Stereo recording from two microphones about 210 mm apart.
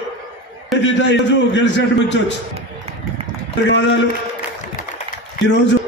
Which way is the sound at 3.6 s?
60° left (ahead or behind).